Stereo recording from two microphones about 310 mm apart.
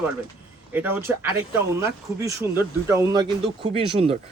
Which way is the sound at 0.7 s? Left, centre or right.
Centre.